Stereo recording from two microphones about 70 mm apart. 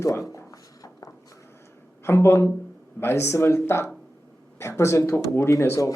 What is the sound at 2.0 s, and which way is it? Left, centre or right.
Speech, left.